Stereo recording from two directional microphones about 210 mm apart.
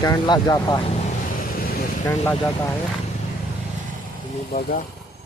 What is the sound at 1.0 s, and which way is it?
Vehicle, 45° left (ahead or behind).